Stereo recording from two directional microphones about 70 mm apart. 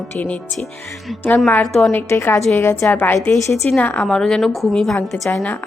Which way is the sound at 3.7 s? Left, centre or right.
Left.